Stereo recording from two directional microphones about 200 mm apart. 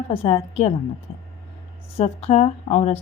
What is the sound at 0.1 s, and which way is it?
Speech, 30° left (ahead or behind).